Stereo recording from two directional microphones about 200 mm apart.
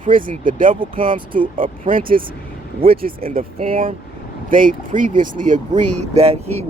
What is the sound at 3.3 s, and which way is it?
Speech, 45° right (ahead or behind).